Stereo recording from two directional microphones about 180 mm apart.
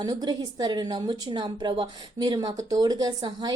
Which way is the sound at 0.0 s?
20° right (ahead or behind).